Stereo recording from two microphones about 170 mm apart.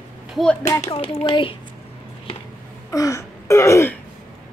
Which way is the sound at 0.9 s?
35° left (ahead or behind).